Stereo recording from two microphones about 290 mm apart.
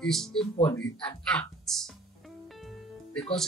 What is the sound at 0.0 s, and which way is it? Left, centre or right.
Speech, centre.